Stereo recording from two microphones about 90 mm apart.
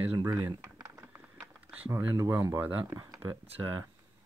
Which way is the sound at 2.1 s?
40° right (ahead or behind).